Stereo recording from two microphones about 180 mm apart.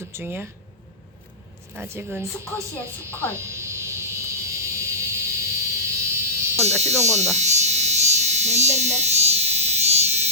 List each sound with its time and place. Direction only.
0.1 s speech: 10° right (ahead or behind)
1.7 s speech: 10° right (ahead or behind)
2.5 s speech: 10° left (ahead or behind)
3.3 s a sound: 15° right (ahead or behind)
6.7 s electric shaver: 40° right (ahead or behind)